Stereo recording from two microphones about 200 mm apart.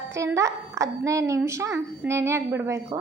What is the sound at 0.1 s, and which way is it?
A woman's voice, 15° right (ahead or behind).